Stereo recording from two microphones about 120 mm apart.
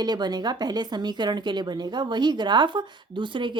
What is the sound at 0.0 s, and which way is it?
A woman's voice, 35° right (ahead or behind).